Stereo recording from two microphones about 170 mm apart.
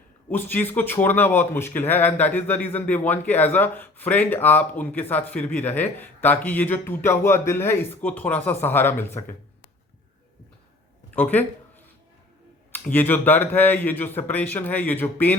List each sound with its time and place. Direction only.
0.3 s speech: 10° left (ahead or behind)
11.1 s speech: 10° left (ahead or behind)
12.7 s speech: 10° left (ahead or behind)